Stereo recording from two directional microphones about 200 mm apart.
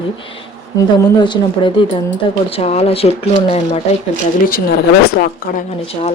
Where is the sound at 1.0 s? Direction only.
20° left (ahead or behind).